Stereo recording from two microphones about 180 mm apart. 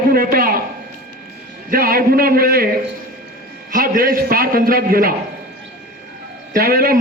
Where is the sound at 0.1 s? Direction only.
55° right (ahead or behind).